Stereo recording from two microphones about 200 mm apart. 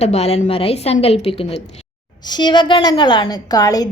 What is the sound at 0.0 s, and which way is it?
A woman's voice, 30° left (ahead or behind).